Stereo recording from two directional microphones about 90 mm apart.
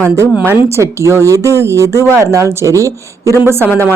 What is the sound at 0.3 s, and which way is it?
Speech, 30° right (ahead or behind).